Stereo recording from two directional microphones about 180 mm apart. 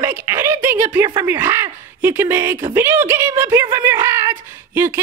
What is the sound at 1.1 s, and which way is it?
Speech, 15° right (ahead or behind).